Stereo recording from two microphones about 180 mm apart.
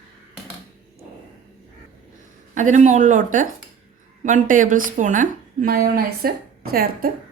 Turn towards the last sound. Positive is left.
turn(degrees=-55)  # may be behind; listen again after turning